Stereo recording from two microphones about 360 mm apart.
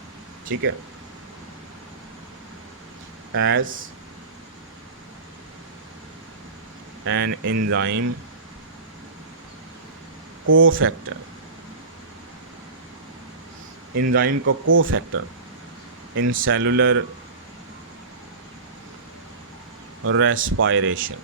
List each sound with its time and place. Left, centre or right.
3.3 s speech: right
7.0 s speech: right
10.4 s speech: right
14.1 s speech: right
20.1 s speech: right